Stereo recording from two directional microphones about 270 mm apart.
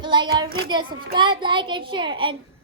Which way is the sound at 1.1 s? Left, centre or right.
Centre.